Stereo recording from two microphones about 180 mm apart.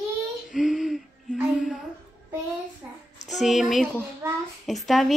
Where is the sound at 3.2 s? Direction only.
Centre (ahead or behind).